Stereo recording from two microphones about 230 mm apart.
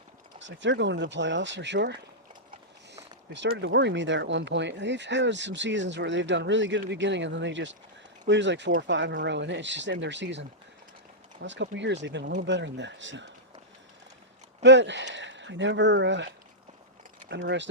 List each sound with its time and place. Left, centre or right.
0.3 s speech: right
3.6 s speech: right
11.4 s speech: right
14.6 s speech: right